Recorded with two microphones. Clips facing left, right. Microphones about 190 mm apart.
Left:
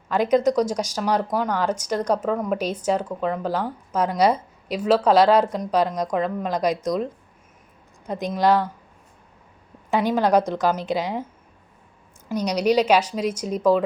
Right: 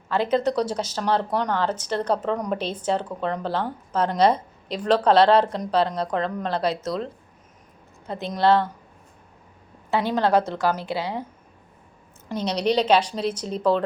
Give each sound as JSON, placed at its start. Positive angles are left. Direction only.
{"t": 0.1, "sound": "speech", "side_deg": 15}
{"t": 9.9, "sound": "speech", "side_deg": 15}
{"t": 12.5, "sound": "speech", "side_deg": 10}